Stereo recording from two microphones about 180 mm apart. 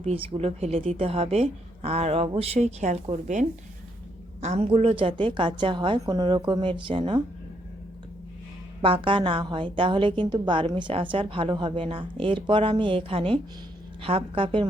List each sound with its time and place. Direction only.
0.0 s a woman's voice: 35° right (ahead or behind)
8.8 s a woman's voice: 30° right (ahead or behind)